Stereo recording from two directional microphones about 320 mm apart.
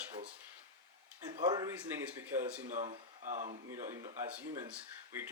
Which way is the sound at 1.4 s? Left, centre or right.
Centre.